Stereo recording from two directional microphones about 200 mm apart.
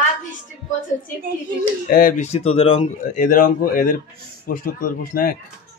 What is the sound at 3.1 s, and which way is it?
A man's voice, 40° left (ahead or behind).